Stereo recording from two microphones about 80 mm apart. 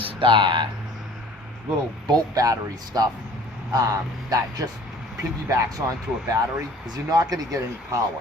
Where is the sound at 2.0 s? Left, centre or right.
Right.